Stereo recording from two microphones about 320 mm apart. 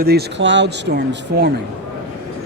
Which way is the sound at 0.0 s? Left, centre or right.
Right.